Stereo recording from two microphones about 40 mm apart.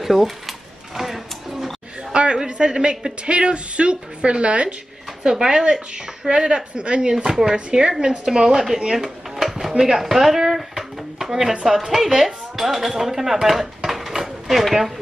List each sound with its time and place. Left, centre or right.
0.0 s a sound: centre
2.1 s a man's voice: right
5.2 s a man's voice: centre
8.9 s drawer open or close: centre
9.8 s a sound: centre
11.6 s speech: centre
13.8 s dishes: centre